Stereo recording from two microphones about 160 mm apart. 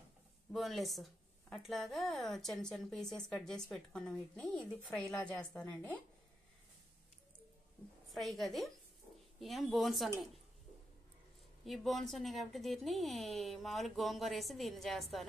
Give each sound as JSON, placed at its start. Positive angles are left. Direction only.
{"t": 0.5, "sound": "a woman's voice", "side_deg": 0}
{"t": 8.1, "sound": "a woman's voice", "side_deg": 0}
{"t": 11.6, "sound": "a woman's voice", "side_deg": 0}